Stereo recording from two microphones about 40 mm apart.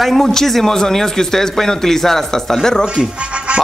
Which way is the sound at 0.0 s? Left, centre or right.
Centre.